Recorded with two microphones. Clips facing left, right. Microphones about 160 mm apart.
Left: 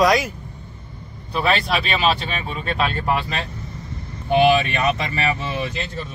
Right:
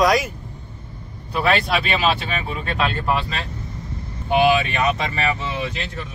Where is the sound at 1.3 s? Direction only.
5° right (ahead or behind).